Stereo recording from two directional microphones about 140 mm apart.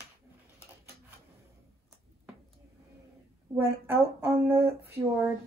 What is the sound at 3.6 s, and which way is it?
Speech, 15° right (ahead or behind).